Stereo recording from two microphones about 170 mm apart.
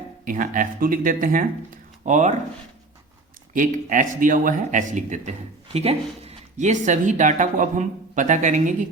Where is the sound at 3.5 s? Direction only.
50° right (ahead or behind).